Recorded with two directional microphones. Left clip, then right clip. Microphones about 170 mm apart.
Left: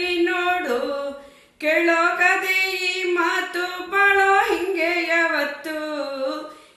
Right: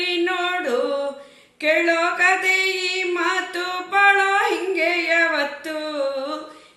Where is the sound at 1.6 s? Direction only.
20° right (ahead or behind).